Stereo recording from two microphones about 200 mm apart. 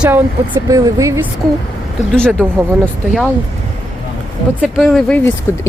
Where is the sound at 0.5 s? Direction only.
20° right (ahead or behind).